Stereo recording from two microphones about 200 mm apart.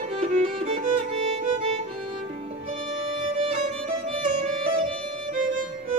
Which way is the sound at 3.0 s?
25° right (ahead or behind).